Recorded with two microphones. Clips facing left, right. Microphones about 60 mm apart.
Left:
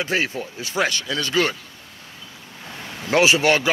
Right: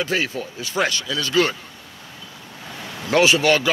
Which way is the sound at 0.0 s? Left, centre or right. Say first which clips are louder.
Even; left.